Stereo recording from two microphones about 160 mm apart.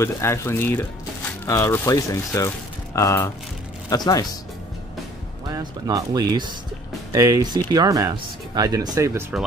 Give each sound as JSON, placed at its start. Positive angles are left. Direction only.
{"t": 0.0, "sound": "speech", "side_deg": 15}
{"t": 5.5, "sound": "speech", "side_deg": -25}